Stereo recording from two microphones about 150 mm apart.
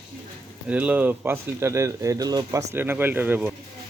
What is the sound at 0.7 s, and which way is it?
Speech, 10° right (ahead or behind).